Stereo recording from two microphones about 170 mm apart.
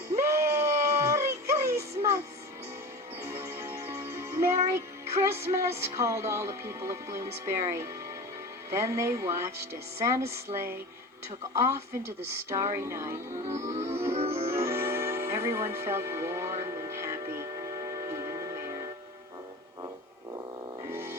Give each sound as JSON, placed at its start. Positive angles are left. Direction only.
{"t": 0.1, "sound": "a sound", "side_deg": -15}
{"t": 3.2, "sound": "music", "side_deg": -15}
{"t": 5.1, "sound": "speech", "side_deg": -15}
{"t": 13.7, "sound": "music", "side_deg": -40}
{"t": 14.5, "sound": "music", "side_deg": -15}
{"t": 20.9, "sound": "music", "side_deg": -15}